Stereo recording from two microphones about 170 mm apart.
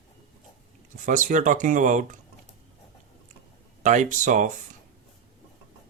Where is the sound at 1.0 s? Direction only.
45° right (ahead or behind).